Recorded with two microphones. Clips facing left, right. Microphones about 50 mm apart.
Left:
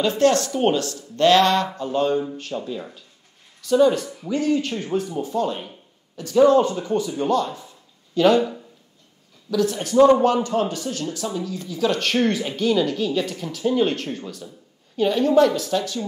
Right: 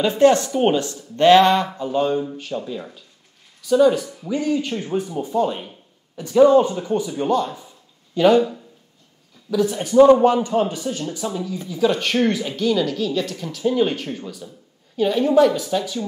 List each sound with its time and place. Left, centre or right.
0.0 s speech: centre
4.3 s speech: centre
9.5 s speech: centre
11.8 s speech: centre